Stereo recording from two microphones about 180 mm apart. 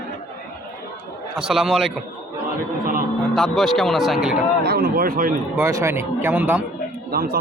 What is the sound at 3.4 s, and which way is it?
Speech, centre (ahead or behind).